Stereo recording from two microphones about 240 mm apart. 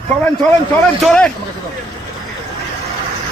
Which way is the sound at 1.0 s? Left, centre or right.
Centre.